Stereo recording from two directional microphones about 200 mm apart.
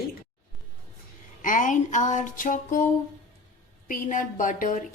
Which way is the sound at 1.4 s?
40° left (ahead or behind).